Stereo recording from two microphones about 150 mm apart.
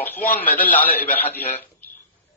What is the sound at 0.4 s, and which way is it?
A man's voice, 10° left (ahead or behind).